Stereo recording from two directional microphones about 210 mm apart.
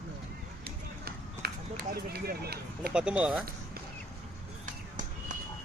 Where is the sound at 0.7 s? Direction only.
45° right (ahead or behind).